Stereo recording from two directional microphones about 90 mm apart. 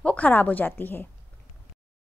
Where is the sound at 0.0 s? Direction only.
15° left (ahead or behind).